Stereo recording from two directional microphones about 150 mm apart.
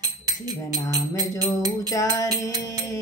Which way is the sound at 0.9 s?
25° right (ahead or behind).